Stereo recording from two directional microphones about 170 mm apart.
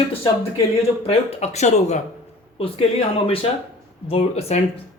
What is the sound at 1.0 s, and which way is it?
Speech, 40° left (ahead or behind).